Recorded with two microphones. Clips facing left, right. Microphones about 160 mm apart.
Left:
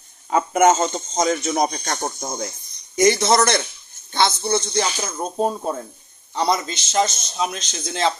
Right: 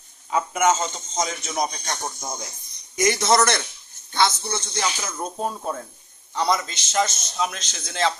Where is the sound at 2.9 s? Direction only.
25° left (ahead or behind).